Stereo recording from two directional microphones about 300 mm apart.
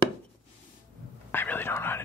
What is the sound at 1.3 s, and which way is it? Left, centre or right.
Whispering, centre.